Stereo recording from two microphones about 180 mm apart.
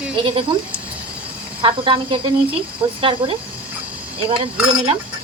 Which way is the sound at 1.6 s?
30° right (ahead or behind).